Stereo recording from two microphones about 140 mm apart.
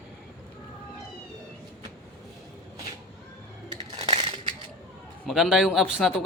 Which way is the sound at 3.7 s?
40° right (ahead or behind).